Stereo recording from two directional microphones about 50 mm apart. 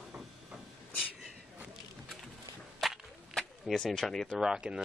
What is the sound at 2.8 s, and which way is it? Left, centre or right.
Whip, centre.